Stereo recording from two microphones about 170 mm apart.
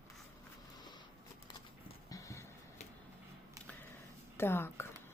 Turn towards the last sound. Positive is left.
turn(degrees=15)  # may be behind; listen again after turning